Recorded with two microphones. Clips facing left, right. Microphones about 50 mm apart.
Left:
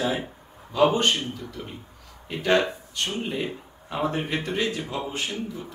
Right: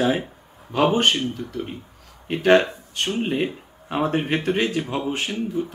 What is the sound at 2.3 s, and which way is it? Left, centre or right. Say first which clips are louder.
Speech: right 6 dB; right.